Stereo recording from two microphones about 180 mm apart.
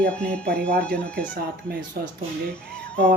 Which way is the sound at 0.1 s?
5° left (ahead or behind).